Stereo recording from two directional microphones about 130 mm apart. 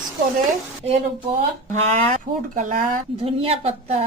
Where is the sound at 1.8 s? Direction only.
60° right (ahead or behind).